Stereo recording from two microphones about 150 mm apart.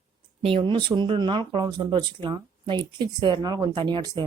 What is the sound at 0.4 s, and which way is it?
Speech, 35° right (ahead or behind).